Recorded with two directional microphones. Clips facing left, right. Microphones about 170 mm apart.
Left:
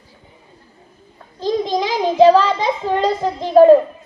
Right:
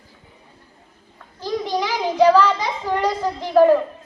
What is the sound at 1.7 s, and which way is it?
Child singing, 15° left (ahead or behind).